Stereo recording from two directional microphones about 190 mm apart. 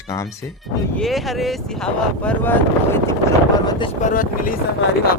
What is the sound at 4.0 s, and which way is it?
Speech, 45° left (ahead or behind).